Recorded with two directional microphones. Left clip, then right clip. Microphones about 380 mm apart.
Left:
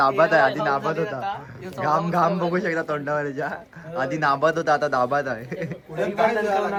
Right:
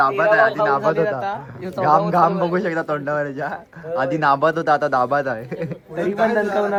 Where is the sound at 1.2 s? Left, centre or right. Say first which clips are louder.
Right 4 dB; right.